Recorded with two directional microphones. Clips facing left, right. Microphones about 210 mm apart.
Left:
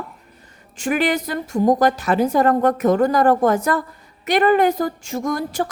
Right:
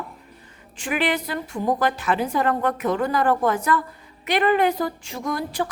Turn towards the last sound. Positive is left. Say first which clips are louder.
# left 4 dB
turn(degrees=45)  # may be behind; listen again after turning